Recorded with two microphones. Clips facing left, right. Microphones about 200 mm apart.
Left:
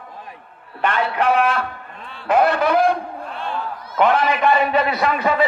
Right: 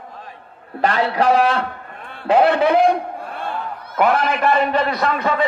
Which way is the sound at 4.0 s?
5° right (ahead or behind).